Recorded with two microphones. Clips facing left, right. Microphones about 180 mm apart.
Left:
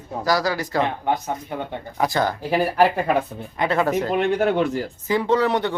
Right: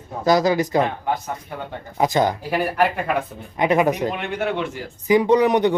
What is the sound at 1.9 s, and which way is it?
Speech, 20° right (ahead or behind).